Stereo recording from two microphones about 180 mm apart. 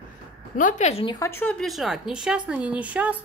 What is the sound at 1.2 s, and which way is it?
A woman's voice, 10° left (ahead or behind).